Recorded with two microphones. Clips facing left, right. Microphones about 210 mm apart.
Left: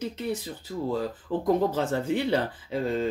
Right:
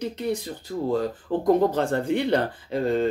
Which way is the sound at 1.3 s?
25° right (ahead or behind).